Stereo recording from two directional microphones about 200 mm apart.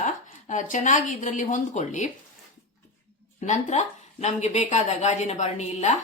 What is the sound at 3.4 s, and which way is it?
Speech, 35° left (ahead or behind).